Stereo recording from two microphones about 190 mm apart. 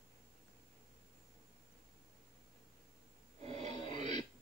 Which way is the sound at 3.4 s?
35° right (ahead or behind).